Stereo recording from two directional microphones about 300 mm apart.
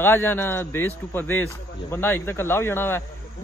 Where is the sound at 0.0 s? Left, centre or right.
Centre.